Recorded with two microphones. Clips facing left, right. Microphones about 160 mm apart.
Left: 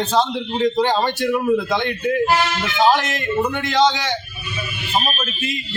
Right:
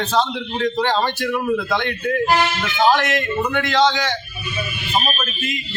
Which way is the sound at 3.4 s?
20° left (ahead or behind).